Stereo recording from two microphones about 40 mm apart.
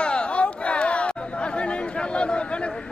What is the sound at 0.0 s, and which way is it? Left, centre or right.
Chatter, left.